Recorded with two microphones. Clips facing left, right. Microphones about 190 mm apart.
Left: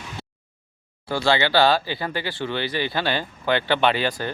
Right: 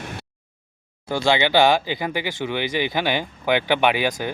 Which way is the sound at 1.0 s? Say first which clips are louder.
Right 1 dB; 15° right (ahead or behind).